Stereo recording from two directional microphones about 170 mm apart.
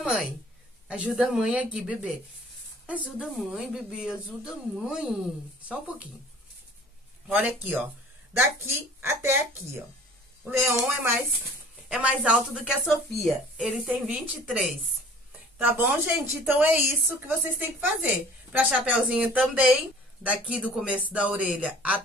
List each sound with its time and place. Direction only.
0.0 s a woman's voice: 5° right (ahead or behind)
7.2 s a woman's voice: 5° right (ahead or behind)
9.0 s a woman's voice: 15° right (ahead or behind)